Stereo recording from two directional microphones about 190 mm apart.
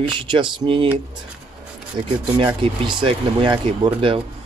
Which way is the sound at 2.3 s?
25° right (ahead or behind).